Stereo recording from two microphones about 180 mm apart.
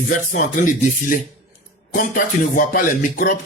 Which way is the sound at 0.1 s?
45° left (ahead or behind).